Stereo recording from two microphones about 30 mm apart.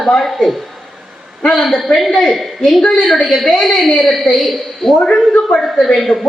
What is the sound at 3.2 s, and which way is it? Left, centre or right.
A woman's voice, centre.